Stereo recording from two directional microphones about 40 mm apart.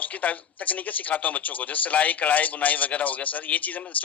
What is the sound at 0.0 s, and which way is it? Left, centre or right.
Speech, left.